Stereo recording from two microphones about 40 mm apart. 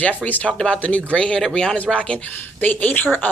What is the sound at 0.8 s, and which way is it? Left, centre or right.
Speech, left.